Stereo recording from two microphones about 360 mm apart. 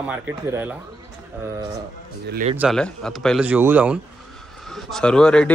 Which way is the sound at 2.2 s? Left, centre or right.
Right.